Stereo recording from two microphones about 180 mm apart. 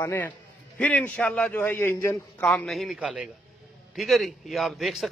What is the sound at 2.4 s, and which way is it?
A man's voice, 5° left (ahead or behind).